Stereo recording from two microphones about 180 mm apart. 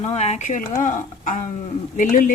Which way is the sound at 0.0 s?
35° left (ahead or behind).